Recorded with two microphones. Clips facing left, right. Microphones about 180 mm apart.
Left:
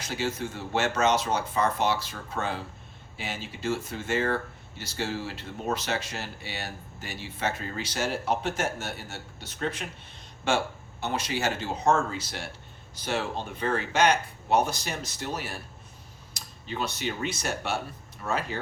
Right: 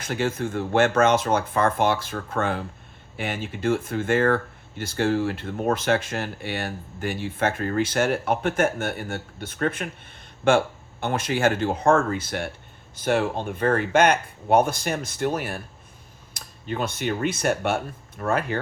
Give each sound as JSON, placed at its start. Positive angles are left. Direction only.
{"t": 0.0, "sound": "speech", "side_deg": -55}